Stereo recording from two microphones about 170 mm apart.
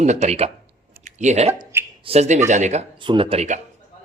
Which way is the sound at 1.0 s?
45° right (ahead or behind).